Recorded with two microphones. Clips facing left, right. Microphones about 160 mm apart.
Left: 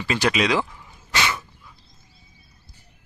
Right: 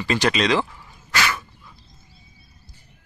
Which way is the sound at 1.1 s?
20° left (ahead or behind).